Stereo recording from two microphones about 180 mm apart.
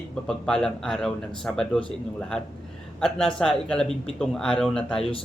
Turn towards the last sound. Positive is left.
turn(degrees=0)  # may be behind; listen again after turning